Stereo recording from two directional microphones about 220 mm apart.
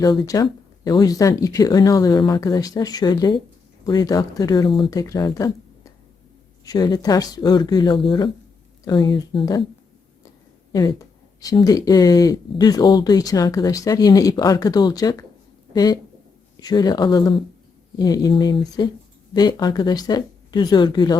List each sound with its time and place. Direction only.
0.0 s speech: 15° left (ahead or behind)